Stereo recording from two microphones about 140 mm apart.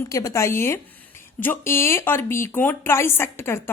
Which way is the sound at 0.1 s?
25° left (ahead or behind).